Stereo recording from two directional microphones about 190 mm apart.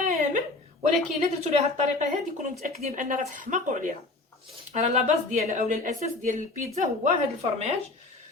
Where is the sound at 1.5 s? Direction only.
35° right (ahead or behind).